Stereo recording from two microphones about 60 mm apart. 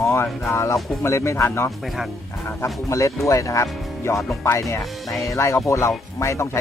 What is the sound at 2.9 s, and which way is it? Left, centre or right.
Speech, left.